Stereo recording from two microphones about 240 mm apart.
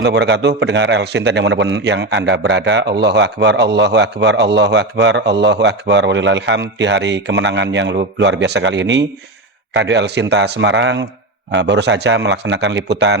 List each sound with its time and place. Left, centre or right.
0.0 s a man's voice: right